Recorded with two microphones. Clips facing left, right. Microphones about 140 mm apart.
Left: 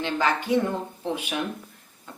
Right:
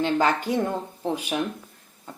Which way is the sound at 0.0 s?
45° right (ahead or behind).